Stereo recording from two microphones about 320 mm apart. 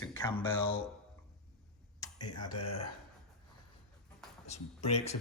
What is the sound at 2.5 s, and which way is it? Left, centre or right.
Speech, left.